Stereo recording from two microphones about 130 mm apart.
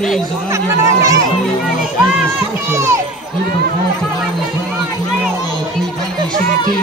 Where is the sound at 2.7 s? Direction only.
20° right (ahead or behind).